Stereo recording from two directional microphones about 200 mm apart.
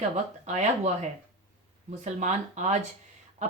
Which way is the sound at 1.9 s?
35° right (ahead or behind).